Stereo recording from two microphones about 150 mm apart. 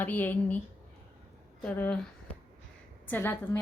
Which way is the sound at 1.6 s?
5° left (ahead or behind).